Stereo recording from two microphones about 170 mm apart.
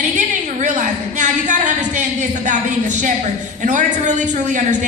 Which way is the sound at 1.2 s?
45° right (ahead or behind).